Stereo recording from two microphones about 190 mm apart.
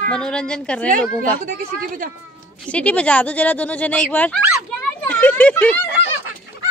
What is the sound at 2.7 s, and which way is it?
Speech, 5° left (ahead or behind).